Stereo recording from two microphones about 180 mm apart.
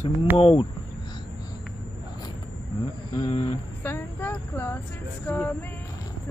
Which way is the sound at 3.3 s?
40° left (ahead or behind).